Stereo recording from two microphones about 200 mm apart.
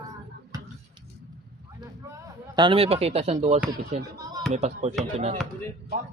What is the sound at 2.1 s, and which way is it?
A man's voice, 20° right (ahead or behind).